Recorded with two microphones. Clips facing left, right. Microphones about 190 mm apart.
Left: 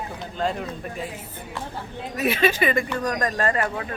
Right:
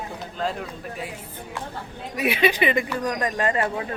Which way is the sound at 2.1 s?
10° right (ahead or behind).